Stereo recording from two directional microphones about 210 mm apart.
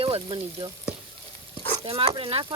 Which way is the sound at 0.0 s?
25° right (ahead or behind).